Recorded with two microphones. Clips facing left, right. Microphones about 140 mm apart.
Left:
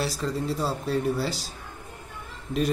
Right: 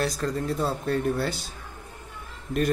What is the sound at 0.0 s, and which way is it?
Speech, 5° left (ahead or behind).